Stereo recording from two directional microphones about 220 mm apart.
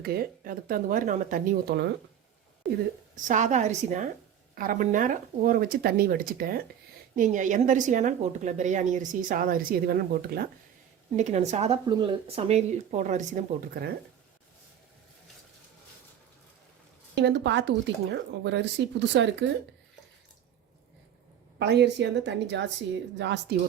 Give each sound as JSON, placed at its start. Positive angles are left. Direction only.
{"t": 0.0, "sound": "a woman's voice", "side_deg": -45}
{"t": 3.2, "sound": "a woman's voice", "side_deg": -35}
{"t": 11.2, "sound": "a woman's voice", "side_deg": -30}
{"t": 17.2, "sound": "speech", "side_deg": -50}
{"t": 21.6, "sound": "speech", "side_deg": -50}